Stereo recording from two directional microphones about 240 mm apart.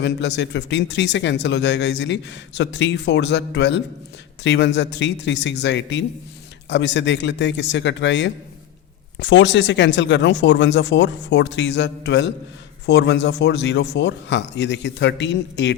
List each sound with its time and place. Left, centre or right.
0.0 s speech: left